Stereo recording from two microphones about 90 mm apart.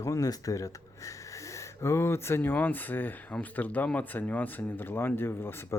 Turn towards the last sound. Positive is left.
turn(degrees=25)  # may be behind; listen again after turning